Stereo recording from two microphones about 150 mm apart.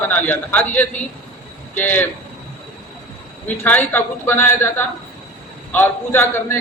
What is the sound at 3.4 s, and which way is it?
A man's voice, 10° left (ahead or behind).